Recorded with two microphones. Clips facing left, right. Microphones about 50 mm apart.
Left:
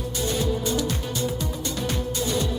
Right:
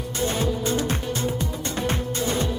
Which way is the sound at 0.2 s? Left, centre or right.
Right.